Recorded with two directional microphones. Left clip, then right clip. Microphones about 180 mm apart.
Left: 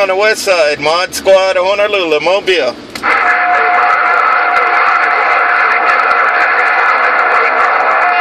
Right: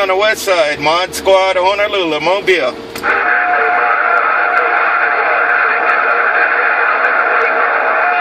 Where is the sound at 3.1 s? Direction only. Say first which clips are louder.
Left 2 dB; 45° left (ahead or behind).